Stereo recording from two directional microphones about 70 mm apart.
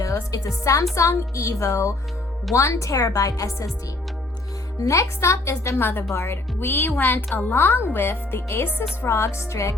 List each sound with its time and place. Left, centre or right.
0.0 s a woman's voice: left
4.8 s a woman's voice: left